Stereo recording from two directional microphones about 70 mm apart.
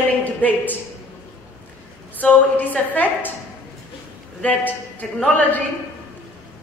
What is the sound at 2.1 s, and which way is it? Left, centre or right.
A woman's voice, left.